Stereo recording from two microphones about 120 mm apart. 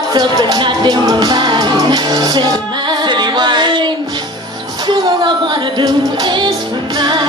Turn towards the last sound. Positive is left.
turn(degrees=-40)  # may be behind; listen again after turning